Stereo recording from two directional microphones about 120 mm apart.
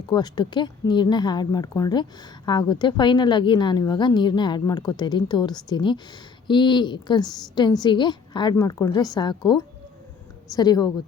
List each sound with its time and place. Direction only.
0.1 s a woman's voice: 35° left (ahead or behind)